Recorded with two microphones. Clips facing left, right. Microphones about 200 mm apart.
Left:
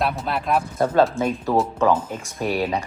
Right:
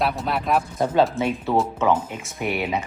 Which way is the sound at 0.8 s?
15° right (ahead or behind).